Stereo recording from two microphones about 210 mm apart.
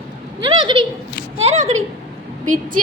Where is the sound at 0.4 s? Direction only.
20° right (ahead or behind).